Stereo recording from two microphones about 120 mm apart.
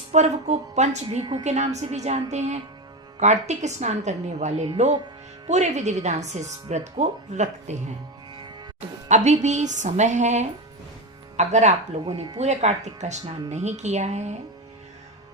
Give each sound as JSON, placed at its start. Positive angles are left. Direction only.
{"t": 0.1, "sound": "speech", "side_deg": -70}
{"t": 1.2, "sound": "a woman's voice", "side_deg": -35}
{"t": 1.5, "sound": "speech", "side_deg": -70}
{"t": 9.0, "sound": "speech", "side_deg": -75}
{"t": 12.4, "sound": "speech", "side_deg": -75}